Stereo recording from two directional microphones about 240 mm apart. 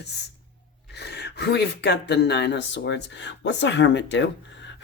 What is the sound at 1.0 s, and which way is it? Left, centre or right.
Speech, left.